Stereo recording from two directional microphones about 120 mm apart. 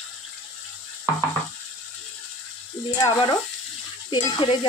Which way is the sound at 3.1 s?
40° left (ahead or behind).